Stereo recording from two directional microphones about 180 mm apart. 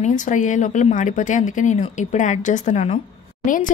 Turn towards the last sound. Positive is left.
turn(degrees=35)  # may be behind; listen again after turning